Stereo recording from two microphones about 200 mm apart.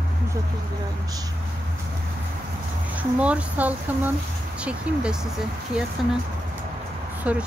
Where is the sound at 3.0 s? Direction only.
5° right (ahead or behind).